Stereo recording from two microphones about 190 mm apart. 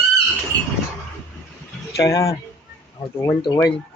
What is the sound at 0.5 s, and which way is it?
Vehicle, 20° right (ahead or behind).